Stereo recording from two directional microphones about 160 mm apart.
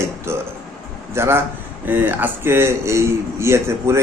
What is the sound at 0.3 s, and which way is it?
Speech, 15° right (ahead or behind).